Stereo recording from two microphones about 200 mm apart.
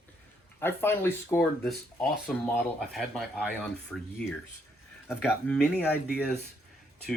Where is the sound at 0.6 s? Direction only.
10° left (ahead or behind).